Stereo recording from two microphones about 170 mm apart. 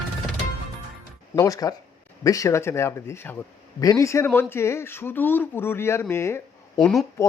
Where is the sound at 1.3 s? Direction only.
20° left (ahead or behind).